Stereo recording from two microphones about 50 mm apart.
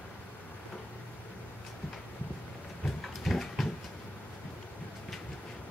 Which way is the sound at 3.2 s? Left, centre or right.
Centre.